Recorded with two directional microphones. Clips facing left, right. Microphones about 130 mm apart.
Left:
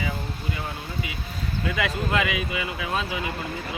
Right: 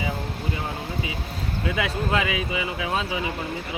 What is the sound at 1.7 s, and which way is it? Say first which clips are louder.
Speech: even; 20° right (ahead or behind).